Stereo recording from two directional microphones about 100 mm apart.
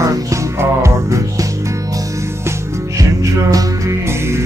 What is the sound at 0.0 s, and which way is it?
Music, 30° right (ahead or behind).